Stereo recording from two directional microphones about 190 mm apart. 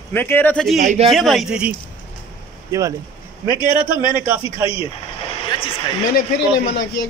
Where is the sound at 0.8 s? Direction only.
35° right (ahead or behind).